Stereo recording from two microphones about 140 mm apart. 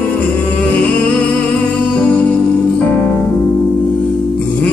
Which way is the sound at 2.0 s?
10° left (ahead or behind).